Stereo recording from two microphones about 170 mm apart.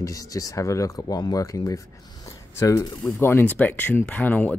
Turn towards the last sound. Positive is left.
turn(degrees=10)  # may be behind; listen again after turning